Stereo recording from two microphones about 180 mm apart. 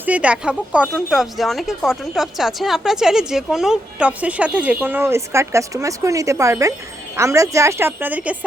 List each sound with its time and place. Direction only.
0.0 s a woman's voice: 5° right (ahead or behind)